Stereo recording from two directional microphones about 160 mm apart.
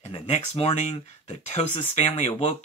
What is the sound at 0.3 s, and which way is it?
Speech, 40° left (ahead or behind).